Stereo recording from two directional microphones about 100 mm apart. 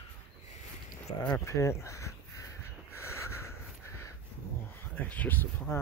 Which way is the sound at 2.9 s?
25° left (ahead or behind).